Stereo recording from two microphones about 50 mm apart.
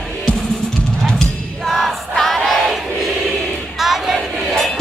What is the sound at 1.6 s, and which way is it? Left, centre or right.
Music, centre.